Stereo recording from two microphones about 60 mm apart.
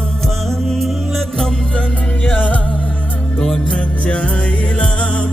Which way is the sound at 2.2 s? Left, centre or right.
Left.